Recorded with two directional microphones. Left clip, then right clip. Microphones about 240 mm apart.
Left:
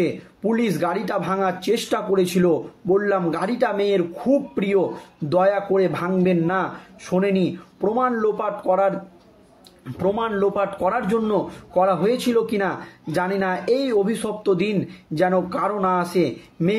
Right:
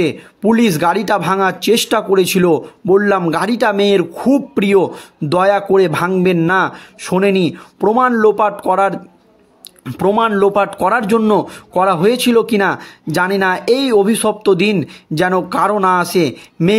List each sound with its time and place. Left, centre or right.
0.0 s speech: right